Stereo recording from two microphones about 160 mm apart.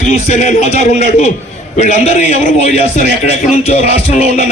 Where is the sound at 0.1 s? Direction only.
40° left (ahead or behind).